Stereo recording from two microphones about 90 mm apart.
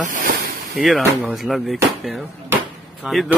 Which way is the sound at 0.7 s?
Centre (ahead or behind).